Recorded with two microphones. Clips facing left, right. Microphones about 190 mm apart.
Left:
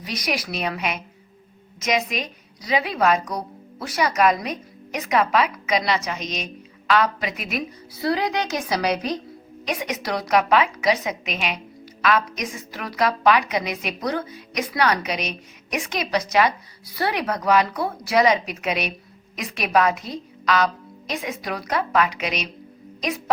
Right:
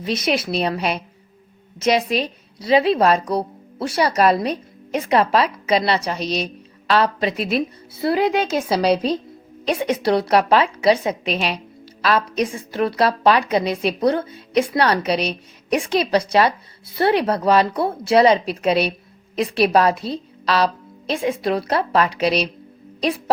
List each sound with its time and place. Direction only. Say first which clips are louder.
0.0 s a woman's voice: right 6 dB; 25° right (ahead or behind)